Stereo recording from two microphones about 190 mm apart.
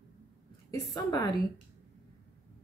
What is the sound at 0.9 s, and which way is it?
Speech, 20° left (ahead or behind).